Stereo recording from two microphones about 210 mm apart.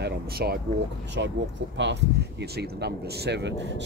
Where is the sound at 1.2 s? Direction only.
60° right (ahead or behind).